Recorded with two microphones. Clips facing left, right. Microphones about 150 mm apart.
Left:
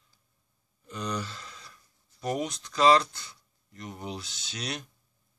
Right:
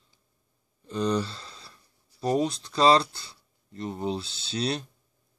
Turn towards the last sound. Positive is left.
turn(degrees=-30)  # may be behind; listen again after turning